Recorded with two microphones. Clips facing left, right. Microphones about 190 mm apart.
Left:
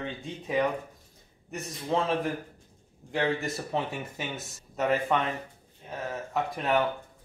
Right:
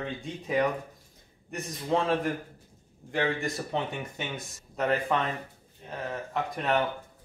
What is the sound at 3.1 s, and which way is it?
Speech, centre (ahead or behind).